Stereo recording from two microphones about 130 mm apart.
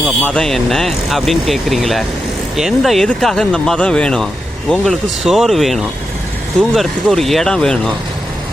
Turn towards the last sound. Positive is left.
turn(degrees=5)  # may be behind; listen again after turning